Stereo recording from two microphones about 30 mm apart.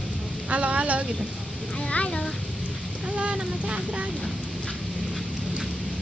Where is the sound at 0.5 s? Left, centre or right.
Right.